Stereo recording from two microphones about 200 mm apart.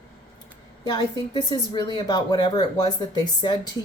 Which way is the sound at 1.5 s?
25° left (ahead or behind).